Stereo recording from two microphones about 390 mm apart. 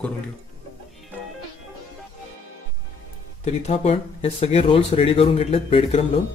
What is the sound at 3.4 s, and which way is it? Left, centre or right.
Speech, centre.